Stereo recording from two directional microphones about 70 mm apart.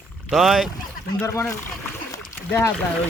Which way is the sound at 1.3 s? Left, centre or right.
Left.